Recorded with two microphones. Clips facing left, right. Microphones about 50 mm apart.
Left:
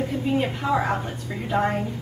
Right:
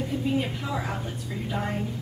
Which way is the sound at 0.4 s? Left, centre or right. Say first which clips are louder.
Left 7 dB; left.